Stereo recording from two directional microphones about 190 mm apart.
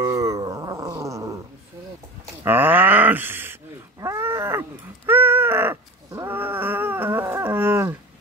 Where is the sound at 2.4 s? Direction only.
10° right (ahead or behind).